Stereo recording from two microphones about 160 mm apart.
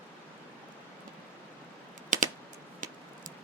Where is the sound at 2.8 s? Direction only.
55° right (ahead or behind).